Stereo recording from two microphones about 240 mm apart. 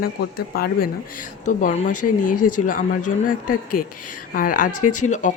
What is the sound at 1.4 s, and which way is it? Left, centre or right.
Speech, left.